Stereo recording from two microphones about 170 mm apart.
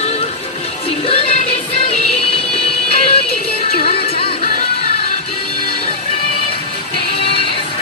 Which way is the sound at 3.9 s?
35° left (ahead or behind).